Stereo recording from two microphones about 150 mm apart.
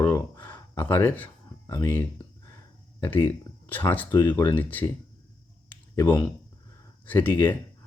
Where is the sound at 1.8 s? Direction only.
15° left (ahead or behind).